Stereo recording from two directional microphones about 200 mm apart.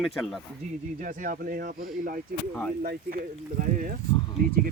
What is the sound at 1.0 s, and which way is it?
Speech, 45° right (ahead or behind).